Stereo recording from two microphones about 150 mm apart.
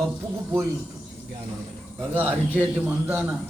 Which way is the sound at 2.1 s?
15° right (ahead or behind).